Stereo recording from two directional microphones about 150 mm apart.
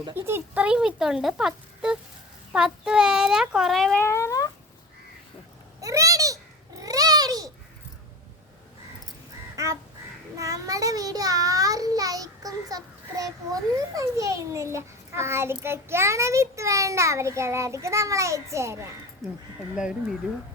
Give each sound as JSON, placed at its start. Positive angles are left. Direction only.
{"t": 0.3, "sound": "speech", "side_deg": -15}
{"t": 4.0, "sound": "a sound", "side_deg": 20}
{"t": 5.8, "sound": "babbling", "side_deg": -20}
{"t": 10.3, "sound": "child singing", "side_deg": -20}
{"t": 13.9, "sound": "a child's voice", "side_deg": -20}
{"t": 19.2, "sound": "speech", "side_deg": 0}